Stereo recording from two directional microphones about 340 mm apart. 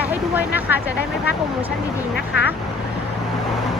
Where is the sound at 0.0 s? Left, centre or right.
Centre.